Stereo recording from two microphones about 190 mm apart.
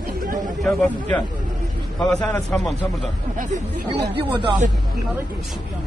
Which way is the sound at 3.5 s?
30° right (ahead or behind).